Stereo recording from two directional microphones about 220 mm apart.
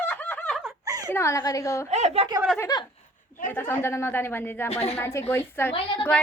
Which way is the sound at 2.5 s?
15° left (ahead or behind).